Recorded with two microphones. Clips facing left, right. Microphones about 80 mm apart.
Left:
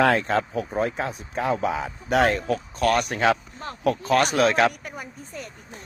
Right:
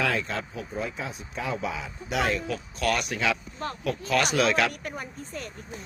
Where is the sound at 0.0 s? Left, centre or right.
Left.